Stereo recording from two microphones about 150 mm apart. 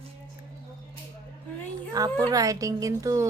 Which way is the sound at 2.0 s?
25° right (ahead or behind).